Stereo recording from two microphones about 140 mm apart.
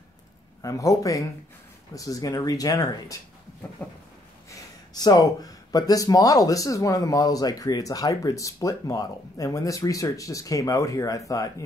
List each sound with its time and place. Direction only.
0.6 s speech: 25° left (ahead or behind)
4.5 s speech: 25° left (ahead or behind)